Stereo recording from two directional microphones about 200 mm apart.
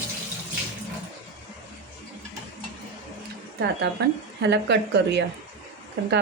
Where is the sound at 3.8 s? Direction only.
60° right (ahead or behind).